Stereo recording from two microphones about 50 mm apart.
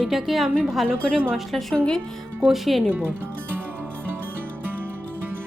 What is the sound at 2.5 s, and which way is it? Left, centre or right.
Speech, centre.